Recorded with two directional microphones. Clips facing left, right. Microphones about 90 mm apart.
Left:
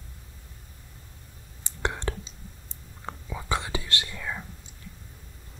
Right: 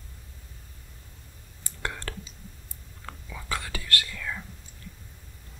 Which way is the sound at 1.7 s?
20° left (ahead or behind).